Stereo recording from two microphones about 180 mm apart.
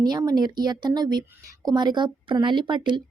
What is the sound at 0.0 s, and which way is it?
Speech, 20° right (ahead or behind).